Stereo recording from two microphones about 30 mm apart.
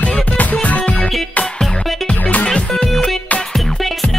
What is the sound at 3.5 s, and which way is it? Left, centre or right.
Music, centre.